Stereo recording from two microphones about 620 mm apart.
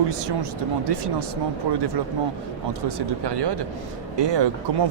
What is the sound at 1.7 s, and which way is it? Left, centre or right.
Speech, right.